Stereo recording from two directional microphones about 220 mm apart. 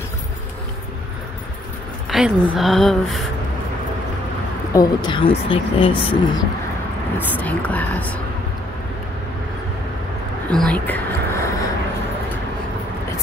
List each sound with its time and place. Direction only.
2.0 s a woman's voice: centre (ahead or behind)
4.7 s speech: 20° left (ahead or behind)
7.2 s speech: 5° left (ahead or behind)
10.5 s speech: 5° left (ahead or behind)